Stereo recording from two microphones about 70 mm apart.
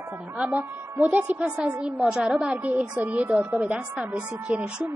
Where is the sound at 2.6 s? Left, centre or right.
Right.